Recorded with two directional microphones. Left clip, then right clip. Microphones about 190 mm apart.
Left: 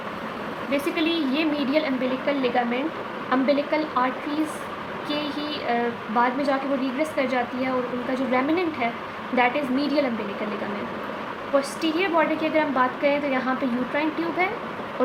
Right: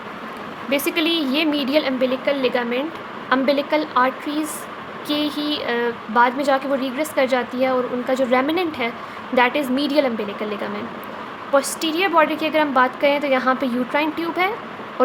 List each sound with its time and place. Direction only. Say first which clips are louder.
0.7 s a woman's voice: right 5 dB; 70° right (ahead or behind)
11.8 s a woman's voice: right 5 dB; 70° right (ahead or behind)